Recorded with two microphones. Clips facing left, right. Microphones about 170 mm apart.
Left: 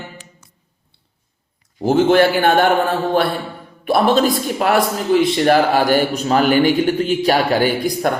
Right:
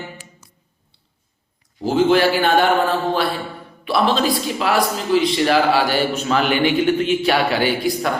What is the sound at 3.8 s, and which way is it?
A man's voice, 50° left (ahead or behind).